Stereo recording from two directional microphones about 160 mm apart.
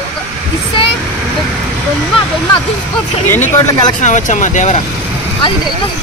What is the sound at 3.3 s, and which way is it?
Speech, 15° left (ahead or behind).